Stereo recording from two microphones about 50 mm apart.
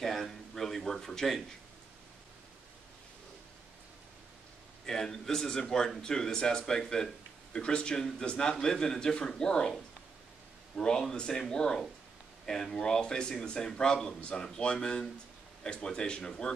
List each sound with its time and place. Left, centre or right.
0.0 s speech: centre
4.8 s speech: centre
10.8 s speech: centre